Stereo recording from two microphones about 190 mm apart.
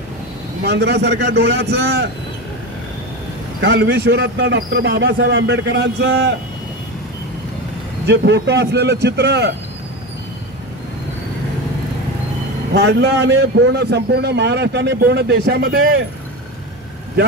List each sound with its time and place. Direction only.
0.7 s a man's voice: 60° right (ahead or behind)
3.6 s a man's voice: 65° right (ahead or behind)
8.1 s a man's voice: 65° right (ahead or behind)
12.7 s a man's voice: 60° right (ahead or behind)